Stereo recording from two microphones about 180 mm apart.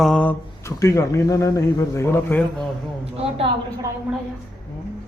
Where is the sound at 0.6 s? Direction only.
20° left (ahead or behind).